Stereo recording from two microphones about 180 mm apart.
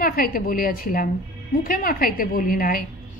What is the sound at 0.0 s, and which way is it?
A woman's voice, 55° left (ahead or behind).